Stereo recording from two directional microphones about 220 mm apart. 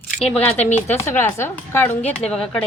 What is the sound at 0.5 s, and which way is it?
Speech, 30° left (ahead or behind).